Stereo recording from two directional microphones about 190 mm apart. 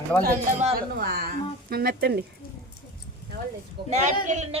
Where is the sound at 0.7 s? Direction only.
50° right (ahead or behind).